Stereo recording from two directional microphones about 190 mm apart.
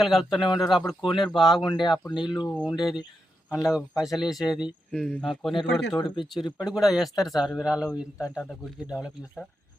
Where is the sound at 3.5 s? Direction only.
20° left (ahead or behind).